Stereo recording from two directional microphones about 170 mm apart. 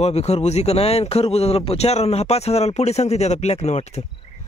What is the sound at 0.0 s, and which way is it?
A man's voice, 40° left (ahead or behind).